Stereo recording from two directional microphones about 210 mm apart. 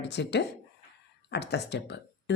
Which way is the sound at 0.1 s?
55° left (ahead or behind).